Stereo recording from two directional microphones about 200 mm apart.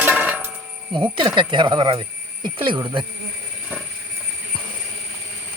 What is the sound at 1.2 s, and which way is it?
Speech, 25° right (ahead or behind).